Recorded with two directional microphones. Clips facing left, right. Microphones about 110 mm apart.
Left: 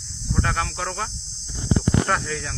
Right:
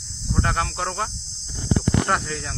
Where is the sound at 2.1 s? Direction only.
30° right (ahead or behind).